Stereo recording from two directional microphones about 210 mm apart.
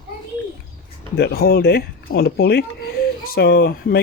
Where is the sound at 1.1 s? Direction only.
50° left (ahead or behind).